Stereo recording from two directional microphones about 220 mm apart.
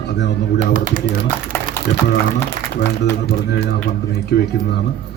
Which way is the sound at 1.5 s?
10° left (ahead or behind).